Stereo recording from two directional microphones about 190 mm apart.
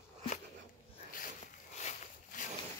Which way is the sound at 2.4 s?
40° left (ahead or behind).